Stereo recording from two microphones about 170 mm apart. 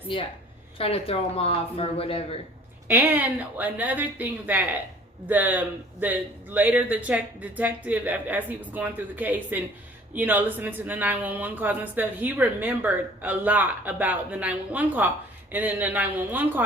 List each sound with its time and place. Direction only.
0.1 s a woman's voice: 30° left (ahead or behind)
2.8 s speech: 10° right (ahead or behind)